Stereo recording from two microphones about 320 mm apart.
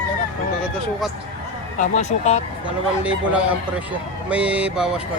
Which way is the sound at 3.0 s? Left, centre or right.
Centre.